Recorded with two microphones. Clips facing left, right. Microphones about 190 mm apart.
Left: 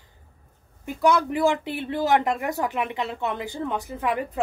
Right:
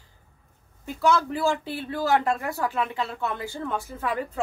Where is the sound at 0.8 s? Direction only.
15° left (ahead or behind).